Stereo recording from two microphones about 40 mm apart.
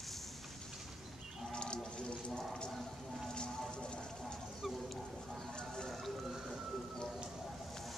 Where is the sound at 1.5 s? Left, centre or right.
Left.